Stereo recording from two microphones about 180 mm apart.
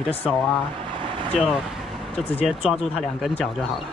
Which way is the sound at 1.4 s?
Centre (ahead or behind).